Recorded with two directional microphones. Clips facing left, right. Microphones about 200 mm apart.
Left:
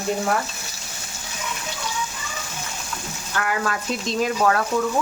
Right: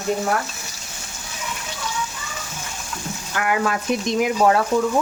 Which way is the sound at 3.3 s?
15° right (ahead or behind).